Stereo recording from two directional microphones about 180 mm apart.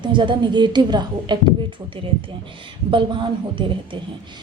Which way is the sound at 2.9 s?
25° right (ahead or behind).